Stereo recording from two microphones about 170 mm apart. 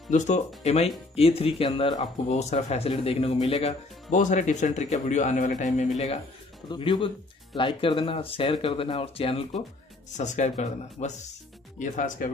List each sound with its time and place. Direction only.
0.1 s speech: 45° left (ahead or behind)
10.1 s speech: 45° left (ahead or behind)